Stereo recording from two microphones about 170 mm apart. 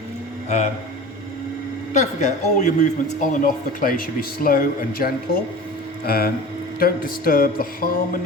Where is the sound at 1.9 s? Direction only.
45° left (ahead or behind).